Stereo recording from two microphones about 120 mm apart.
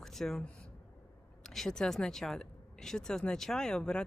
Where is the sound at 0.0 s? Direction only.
5° left (ahead or behind).